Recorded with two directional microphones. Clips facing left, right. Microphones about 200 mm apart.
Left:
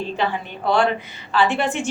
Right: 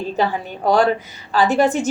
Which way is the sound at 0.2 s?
40° right (ahead or behind).